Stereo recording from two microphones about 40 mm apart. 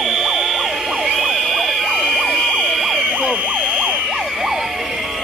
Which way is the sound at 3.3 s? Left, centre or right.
Right.